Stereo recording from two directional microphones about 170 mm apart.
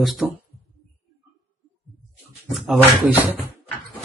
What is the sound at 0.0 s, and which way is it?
Speech, centre (ahead or behind).